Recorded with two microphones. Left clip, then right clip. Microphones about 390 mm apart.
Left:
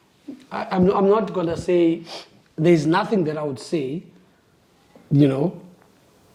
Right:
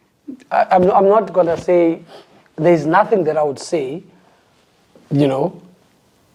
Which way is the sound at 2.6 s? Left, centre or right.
Right.